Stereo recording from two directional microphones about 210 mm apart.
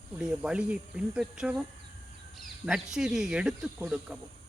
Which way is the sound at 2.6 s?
Centre (ahead or behind).